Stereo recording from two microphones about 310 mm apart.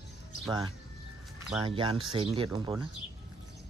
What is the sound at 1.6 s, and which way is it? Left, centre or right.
Speech, centre.